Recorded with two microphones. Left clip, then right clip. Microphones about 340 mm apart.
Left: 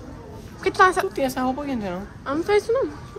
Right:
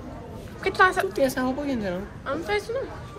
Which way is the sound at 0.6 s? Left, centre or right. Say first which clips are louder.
Left 3 dB; centre.